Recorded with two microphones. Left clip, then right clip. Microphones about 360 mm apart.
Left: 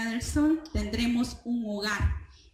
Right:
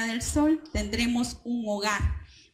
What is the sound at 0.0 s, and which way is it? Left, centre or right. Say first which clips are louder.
A woman's voice: right 2 dB; centre.